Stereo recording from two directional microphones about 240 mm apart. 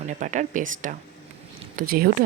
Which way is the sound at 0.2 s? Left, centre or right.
Right.